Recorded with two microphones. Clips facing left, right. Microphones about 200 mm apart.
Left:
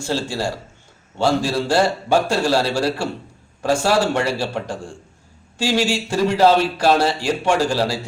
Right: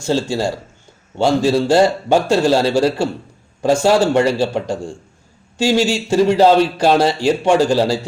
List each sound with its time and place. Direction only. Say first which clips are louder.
0.0 s a man's voice: right 5 dB; 20° right (ahead or behind)